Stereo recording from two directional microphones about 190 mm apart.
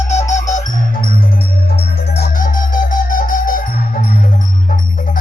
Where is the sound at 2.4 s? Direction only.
45° left (ahead or behind).